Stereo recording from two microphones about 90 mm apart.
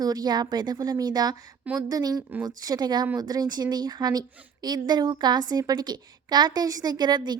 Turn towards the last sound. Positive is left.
turn(degrees=-55)  # may be behind; listen again after turning